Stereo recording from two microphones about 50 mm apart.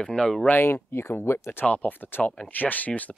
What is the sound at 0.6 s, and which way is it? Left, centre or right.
Speech, left.